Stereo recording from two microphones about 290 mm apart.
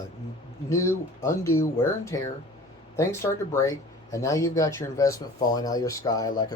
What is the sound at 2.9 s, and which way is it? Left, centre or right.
Speech, centre.